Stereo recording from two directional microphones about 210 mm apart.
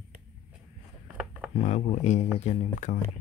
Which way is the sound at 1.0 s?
5° right (ahead or behind).